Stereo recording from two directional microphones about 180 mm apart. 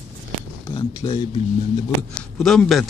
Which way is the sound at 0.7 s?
30° left (ahead or behind).